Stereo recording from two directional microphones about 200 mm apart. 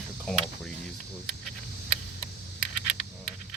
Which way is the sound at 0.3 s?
Centre (ahead or behind).